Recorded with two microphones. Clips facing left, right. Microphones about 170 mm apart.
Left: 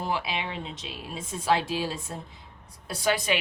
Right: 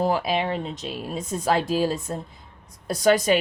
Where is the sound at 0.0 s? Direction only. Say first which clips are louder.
Right 8 dB; 45° right (ahead or behind).